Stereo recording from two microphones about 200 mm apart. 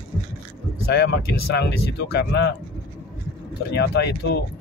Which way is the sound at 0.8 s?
55° left (ahead or behind).